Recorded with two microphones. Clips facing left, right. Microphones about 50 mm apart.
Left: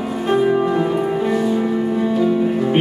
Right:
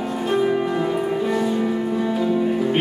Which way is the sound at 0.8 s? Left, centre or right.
Centre.